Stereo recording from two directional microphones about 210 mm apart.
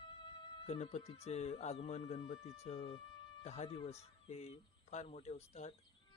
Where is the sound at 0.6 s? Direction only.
30° left (ahead or behind).